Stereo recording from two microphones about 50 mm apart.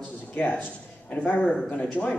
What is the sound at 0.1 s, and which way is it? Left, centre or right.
Speech, left.